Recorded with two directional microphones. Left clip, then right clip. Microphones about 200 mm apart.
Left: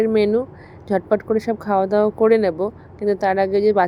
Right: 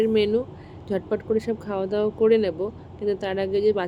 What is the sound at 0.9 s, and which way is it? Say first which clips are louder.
Speech: left 6 dB; 20° left (ahead or behind).